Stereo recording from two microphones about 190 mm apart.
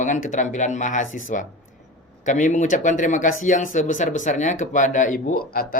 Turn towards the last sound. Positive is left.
turn(degrees=50)  # may be behind; listen again after turning